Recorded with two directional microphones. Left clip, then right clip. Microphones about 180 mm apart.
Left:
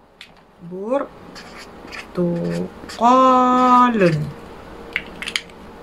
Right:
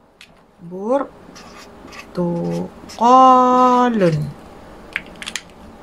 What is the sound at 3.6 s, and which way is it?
Speech, 65° right (ahead or behind).